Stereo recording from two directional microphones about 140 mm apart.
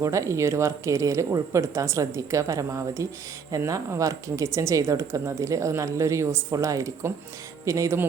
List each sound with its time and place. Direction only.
0.0 s speech: 20° right (ahead or behind)